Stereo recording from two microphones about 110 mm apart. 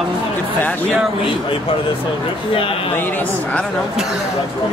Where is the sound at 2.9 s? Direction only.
15° left (ahead or behind).